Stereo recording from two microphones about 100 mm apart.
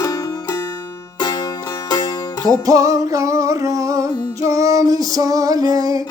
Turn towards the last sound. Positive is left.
turn(degrees=-40)  # may be behind; listen again after turning